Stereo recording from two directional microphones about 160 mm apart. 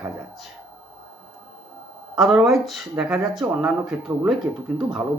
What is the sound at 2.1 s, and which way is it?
Speech, centre (ahead or behind).